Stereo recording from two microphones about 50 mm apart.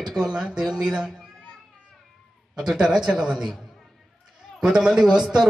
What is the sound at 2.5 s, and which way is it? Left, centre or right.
Speech, centre.